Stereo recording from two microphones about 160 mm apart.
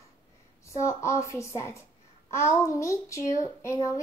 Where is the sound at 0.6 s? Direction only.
20° left (ahead or behind).